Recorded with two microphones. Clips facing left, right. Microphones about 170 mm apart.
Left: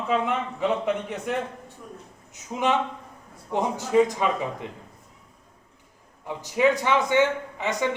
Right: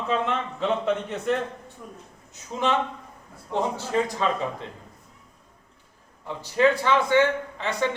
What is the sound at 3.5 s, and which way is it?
Speech, 15° left (ahead or behind).